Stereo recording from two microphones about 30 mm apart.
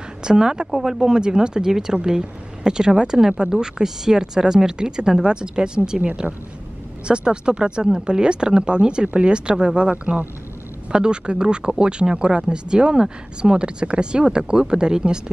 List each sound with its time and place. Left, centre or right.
0.2 s speech: right
0.7 s speech: centre
6.2 s speech: centre
7.1 s speech: right
14.2 s speech: right